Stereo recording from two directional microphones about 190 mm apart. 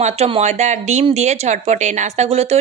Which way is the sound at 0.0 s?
35° right (ahead or behind).